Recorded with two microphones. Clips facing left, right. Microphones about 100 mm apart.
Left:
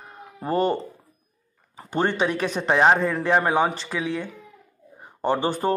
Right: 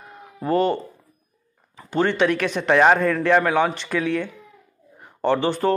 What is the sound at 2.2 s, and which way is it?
Speech, 35° left (ahead or behind).